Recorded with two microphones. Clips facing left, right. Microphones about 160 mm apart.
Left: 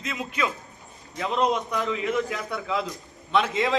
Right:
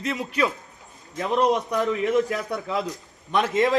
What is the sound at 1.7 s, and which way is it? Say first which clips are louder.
A man's voice: right 4 dB; 40° right (ahead or behind).